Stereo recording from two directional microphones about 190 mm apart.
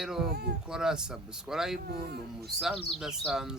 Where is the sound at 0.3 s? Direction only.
55° right (ahead or behind).